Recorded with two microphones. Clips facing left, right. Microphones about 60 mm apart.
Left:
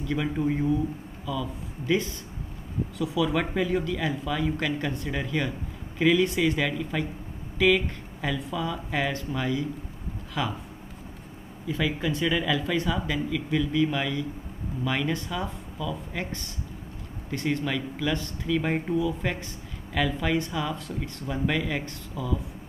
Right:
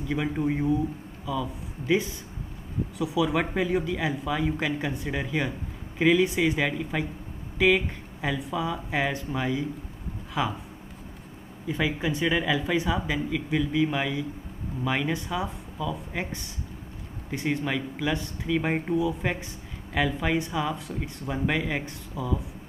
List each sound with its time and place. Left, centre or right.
0.0 s speech: centre
11.6 s speech: centre